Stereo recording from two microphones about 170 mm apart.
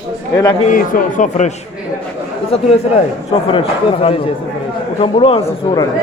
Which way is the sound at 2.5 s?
35° left (ahead or behind).